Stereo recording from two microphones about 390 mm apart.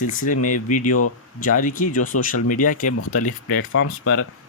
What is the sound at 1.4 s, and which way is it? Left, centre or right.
Speech, centre.